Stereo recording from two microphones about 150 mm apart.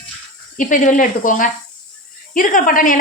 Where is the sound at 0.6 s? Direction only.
60° left (ahead or behind).